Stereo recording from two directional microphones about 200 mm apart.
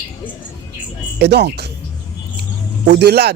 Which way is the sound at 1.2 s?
55° right (ahead or behind).